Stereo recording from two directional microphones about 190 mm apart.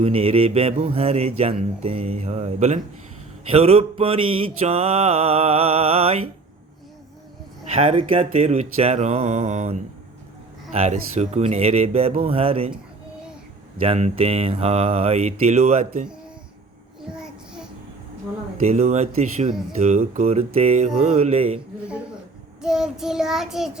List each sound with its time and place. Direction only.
0.0 s mantra: 30° right (ahead or behind)
7.8 s mantra: 30° right (ahead or behind)
13.8 s mantra: 30° right (ahead or behind)
17.1 s child singing: 5° right (ahead or behind)
18.6 s mantra: 35° right (ahead or behind)
22.6 s child singing: 5° right (ahead or behind)